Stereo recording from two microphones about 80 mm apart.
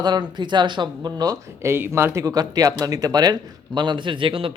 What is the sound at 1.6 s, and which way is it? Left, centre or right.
Speech, right.